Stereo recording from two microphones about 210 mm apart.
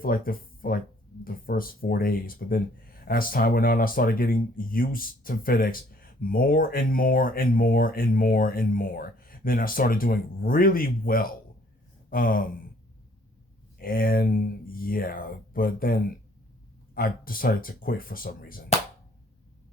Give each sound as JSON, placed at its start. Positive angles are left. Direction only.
{"t": 0.0, "sound": "speech", "side_deg": 45}
{"t": 12.1, "sound": "a sound", "side_deg": 40}
{"t": 13.8, "sound": "speech", "side_deg": 45}